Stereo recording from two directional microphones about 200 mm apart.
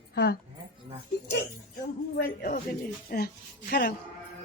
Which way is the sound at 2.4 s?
50° left (ahead or behind).